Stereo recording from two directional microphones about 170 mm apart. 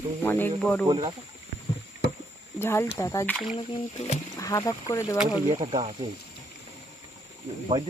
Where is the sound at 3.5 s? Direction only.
40° left (ahead or behind).